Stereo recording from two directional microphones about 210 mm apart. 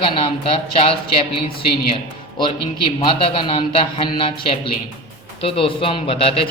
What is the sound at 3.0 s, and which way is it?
A man's voice, 25° left (ahead or behind).